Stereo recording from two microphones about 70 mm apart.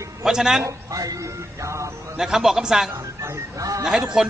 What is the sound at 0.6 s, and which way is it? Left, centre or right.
Speech, right.